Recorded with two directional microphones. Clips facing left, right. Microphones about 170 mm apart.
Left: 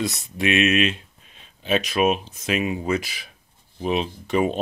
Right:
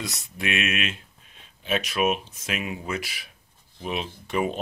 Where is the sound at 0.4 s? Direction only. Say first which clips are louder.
Left 8 dB; 25° left (ahead or behind).